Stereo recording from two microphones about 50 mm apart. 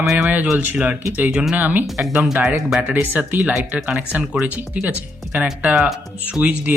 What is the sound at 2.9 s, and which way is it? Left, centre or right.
Speech, right.